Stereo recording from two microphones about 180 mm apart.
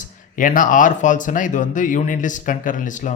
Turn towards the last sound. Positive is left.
turn(degrees=45)  # may be behind; listen again after turning